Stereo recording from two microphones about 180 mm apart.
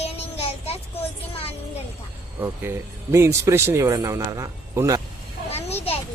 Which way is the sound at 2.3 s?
15° right (ahead or behind).